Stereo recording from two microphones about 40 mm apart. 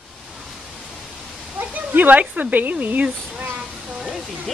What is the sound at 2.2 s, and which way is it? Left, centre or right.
Speech, right.